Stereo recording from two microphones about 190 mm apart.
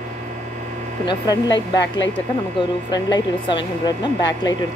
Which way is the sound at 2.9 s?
25° left (ahead or behind).